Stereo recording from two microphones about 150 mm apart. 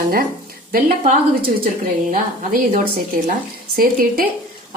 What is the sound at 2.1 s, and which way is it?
A woman's voice, 65° right (ahead or behind).